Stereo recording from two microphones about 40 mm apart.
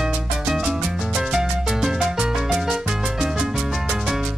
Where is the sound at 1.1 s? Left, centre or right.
Centre.